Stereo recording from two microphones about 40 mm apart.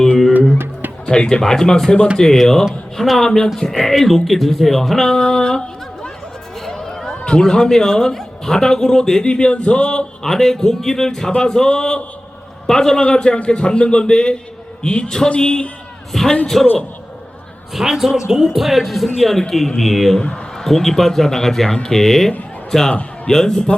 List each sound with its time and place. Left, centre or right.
1.0 s a man's voice: left
6.7 s a sound: centre
7.3 s a man's voice: left
10.2 s a man's voice: centre
17.7 s speech: centre
20.1 s a man's voice: left
20.7 s a man's voice: centre